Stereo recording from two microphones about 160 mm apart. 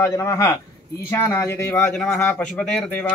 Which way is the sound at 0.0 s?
20° left (ahead or behind).